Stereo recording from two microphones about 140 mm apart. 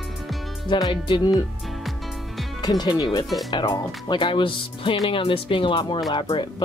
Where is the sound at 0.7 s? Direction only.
30° left (ahead or behind).